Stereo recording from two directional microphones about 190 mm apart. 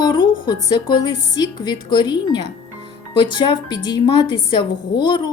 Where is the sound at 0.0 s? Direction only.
20° left (ahead or behind).